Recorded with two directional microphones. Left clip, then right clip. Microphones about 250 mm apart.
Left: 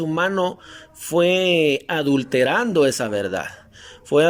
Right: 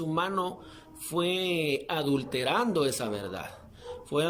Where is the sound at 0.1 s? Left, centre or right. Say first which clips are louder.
Left 8 dB; left.